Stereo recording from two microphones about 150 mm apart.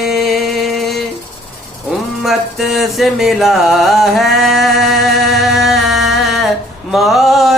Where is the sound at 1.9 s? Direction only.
Centre (ahead or behind).